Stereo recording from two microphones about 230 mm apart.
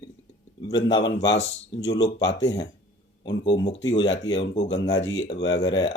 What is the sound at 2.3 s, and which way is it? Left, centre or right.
Speech, left.